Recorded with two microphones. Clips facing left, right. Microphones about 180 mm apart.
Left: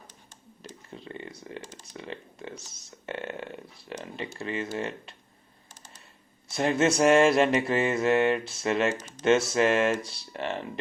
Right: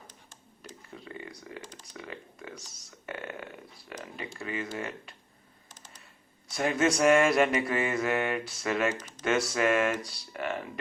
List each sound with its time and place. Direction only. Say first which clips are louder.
0.9 s a sound: left 3 dB; 25° left (ahead or behind)
1.8 s speech: left 3 dB; 25° left (ahead or behind)
6.5 s speech: left 3 dB; 25° left (ahead or behind)